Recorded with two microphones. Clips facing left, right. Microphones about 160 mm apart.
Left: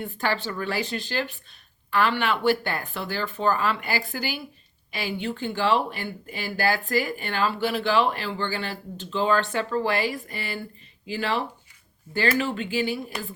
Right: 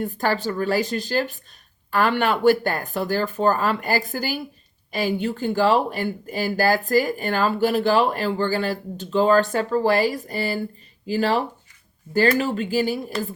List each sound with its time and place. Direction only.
0.0 s speech: 40° right (ahead or behind)